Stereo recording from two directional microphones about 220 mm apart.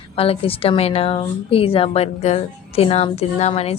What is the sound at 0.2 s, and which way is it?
A woman's voice, 25° left (ahead or behind).